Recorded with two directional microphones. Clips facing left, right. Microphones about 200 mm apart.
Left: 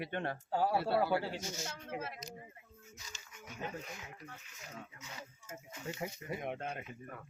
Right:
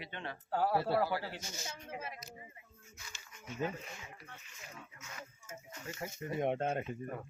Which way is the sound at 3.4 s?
Centre (ahead or behind).